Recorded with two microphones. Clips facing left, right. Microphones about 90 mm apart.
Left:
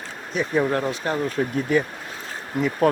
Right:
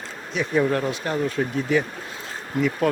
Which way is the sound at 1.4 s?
60° left (ahead or behind).